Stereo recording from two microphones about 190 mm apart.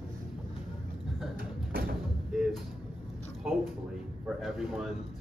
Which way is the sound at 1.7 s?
50° right (ahead or behind).